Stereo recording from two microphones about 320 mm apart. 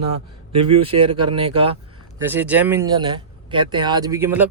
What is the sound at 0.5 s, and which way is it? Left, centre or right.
Speech, centre.